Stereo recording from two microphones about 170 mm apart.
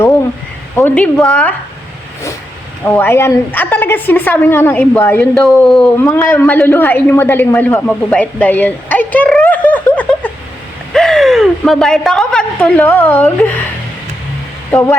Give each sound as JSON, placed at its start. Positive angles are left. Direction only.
{"t": 0.8, "sound": "a woman's voice", "side_deg": 10}
{"t": 2.8, "sound": "a woman's voice", "side_deg": 15}
{"t": 14.7, "sound": "speech", "side_deg": 15}